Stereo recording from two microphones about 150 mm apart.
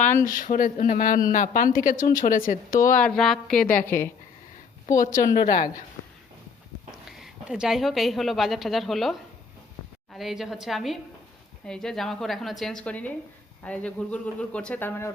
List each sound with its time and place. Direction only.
0.3 s a woman's voice: 65° left (ahead or behind)
3.0 s a woman's voice: centre (ahead or behind)
3.8 s speech: 15° left (ahead or behind)
4.9 s a woman's voice: 60° left (ahead or behind)
7.2 s a woman's voice: 5° right (ahead or behind); by 15.1 s 15° left (ahead or behind)